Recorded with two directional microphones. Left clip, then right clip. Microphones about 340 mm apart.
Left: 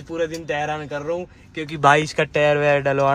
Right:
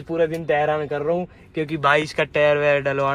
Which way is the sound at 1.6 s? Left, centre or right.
Centre.